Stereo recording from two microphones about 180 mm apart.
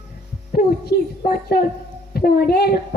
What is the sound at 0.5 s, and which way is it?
A woman's voice, 55° left (ahead or behind).